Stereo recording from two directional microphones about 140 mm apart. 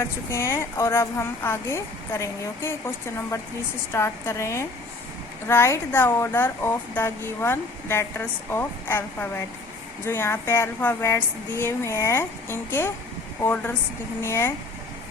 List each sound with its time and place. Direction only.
0.0 s a woman's voice: 20° left (ahead or behind)